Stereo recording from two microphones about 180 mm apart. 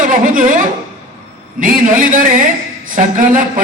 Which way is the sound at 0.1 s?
50° right (ahead or behind).